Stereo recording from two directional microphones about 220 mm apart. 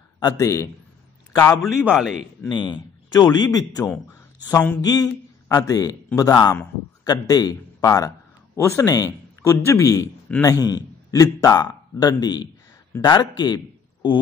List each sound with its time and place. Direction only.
0.2 s speech: 15° left (ahead or behind)
1.8 s a man's voice: 5° right (ahead or behind)
2.5 s a man's voice: 20° left (ahead or behind)